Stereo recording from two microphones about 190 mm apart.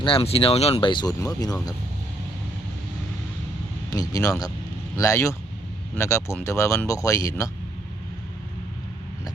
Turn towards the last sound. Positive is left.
turn(degrees=20)  # may be behind; listen again after turning